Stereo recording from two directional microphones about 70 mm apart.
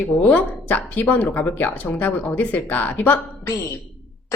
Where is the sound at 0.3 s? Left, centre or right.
Left.